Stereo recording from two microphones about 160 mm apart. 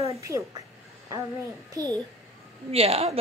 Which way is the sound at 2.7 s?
40° right (ahead or behind).